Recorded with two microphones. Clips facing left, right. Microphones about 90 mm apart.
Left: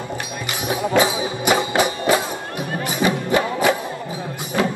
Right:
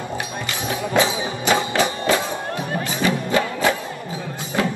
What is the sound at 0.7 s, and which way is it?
Music, 20° left (ahead or behind).